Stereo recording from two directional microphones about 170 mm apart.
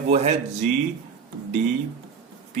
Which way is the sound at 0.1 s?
40° right (ahead or behind).